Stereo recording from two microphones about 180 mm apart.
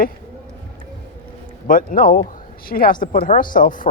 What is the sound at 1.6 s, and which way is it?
Speech, 50° left (ahead or behind).